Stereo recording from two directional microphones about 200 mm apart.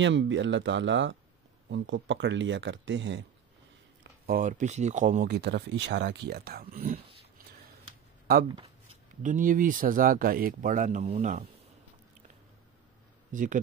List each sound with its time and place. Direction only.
0.0 s speech: 65° right (ahead or behind)
4.0 s speech: 45° right (ahead or behind)
5.3 s speech: 55° right (ahead or behind)
9.2 s speech: 40° right (ahead or behind)
13.3 s speech: 40° right (ahead or behind)